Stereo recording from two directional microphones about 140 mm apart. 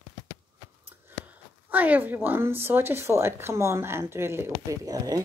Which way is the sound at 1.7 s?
10° right (ahead or behind).